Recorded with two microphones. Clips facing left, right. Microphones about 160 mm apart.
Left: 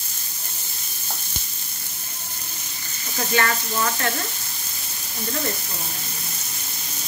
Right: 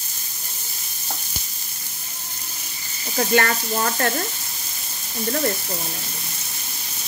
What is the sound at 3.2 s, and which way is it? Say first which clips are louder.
Frying: right 3 dB; 40° right (ahead or behind).